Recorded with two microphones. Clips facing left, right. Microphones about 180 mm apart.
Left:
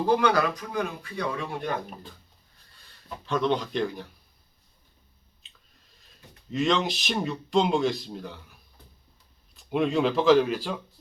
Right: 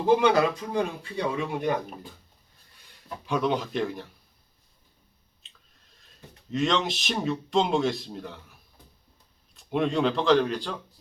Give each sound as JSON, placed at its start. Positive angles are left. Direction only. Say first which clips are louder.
{"t": 0.1, "sound": "speech", "louder": "right 3 dB", "side_deg": -25}
{"t": 3.2, "sound": "speech", "louder": "left 1 dB", "side_deg": -10}
{"t": 6.5, "sound": "speech", "louder": "left 1 dB", "side_deg": 0}
{"t": 9.6, "sound": "speech", "louder": "left 1 dB", "side_deg": 0}